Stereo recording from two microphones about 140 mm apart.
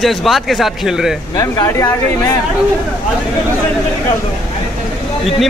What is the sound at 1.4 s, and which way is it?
Speech, 20° left (ahead or behind).